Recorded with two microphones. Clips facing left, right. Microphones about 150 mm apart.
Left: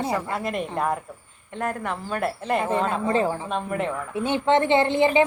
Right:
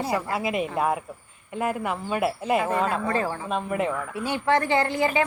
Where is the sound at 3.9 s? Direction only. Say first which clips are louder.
Left 3 dB; 25° left (ahead or behind).